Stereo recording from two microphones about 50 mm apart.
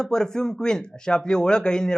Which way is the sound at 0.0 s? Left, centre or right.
Centre.